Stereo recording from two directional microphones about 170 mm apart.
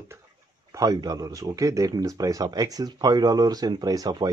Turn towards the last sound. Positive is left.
turn(degrees=-25)  # may be behind; listen again after turning